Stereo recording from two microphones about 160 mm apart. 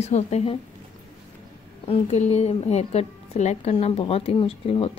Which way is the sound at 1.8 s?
45° left (ahead or behind).